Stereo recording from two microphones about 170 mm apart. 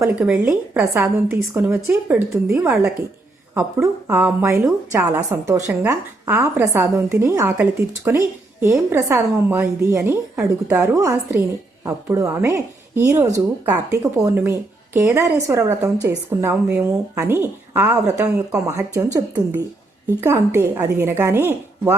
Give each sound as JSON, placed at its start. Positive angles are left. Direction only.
{"t": 0.0, "sound": "a woman's voice", "side_deg": -15}
{"t": 20.2, "sound": "a woman's voice", "side_deg": -15}